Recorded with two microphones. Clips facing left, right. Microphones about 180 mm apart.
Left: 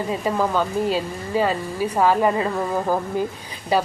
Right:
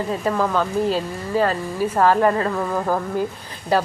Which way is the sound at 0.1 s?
10° left (ahead or behind).